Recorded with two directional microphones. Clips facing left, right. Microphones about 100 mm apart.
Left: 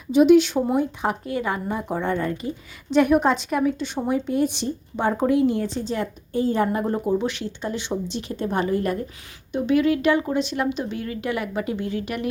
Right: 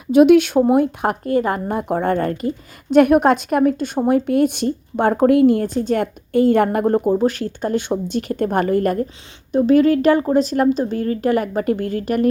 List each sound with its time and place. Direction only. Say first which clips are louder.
0.1 s a woman's voice: right 4 dB; 60° right (ahead or behind)
9.5 s speech: right 6 dB; 40° right (ahead or behind)